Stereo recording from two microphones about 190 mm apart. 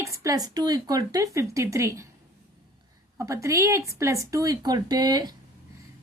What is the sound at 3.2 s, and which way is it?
A woman's voice, 15° right (ahead or behind).